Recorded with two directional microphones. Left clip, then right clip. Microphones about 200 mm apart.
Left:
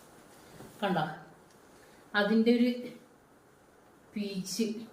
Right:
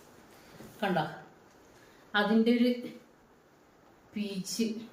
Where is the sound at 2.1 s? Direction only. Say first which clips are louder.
Even; 15° right (ahead or behind).